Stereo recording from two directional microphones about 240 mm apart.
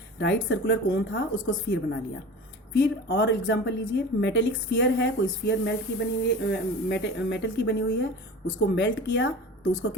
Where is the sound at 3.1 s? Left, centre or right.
Left.